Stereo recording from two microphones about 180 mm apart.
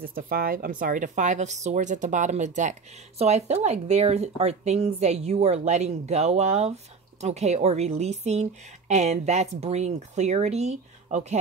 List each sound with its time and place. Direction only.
0.0 s speech: 55° right (ahead or behind); by 11.3 s 40° right (ahead or behind)